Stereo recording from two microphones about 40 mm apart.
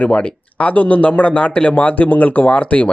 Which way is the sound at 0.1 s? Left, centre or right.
Left.